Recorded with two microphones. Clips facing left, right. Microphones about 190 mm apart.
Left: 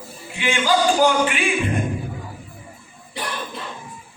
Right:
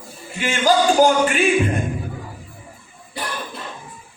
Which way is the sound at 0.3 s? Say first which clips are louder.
Right 2 dB; 45° right (ahead or behind).